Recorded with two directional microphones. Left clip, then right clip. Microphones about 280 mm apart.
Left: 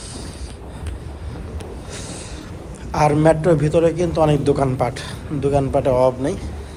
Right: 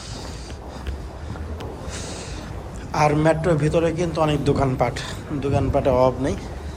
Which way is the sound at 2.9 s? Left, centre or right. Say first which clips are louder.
Left 3 dB; centre.